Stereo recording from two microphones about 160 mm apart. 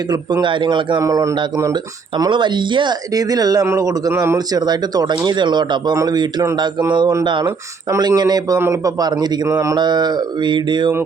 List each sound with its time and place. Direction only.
0.1 s speech: 30° right (ahead or behind)
9.5 s mantra: 15° right (ahead or behind)
9.7 s speech: 25° right (ahead or behind)